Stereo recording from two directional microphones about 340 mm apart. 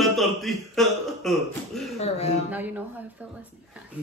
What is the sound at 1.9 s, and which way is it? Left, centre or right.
Music, centre.